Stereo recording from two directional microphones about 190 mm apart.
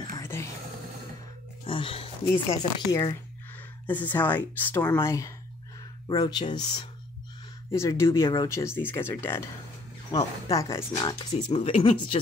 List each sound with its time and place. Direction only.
0.1 s whispering: 15° left (ahead or behind)
1.7 s speech: 30° left (ahead or behind)
7.7 s speech: 15° left (ahead or behind)